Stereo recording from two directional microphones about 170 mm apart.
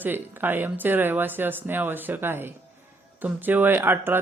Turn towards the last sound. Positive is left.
turn(degrees=-10)  # may be behind; listen again after turning